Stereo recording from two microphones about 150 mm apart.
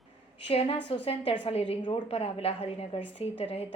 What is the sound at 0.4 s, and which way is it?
A woman's voice, 40° left (ahead or behind).